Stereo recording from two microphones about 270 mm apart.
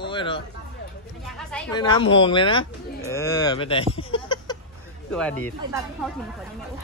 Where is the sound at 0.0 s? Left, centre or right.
Centre.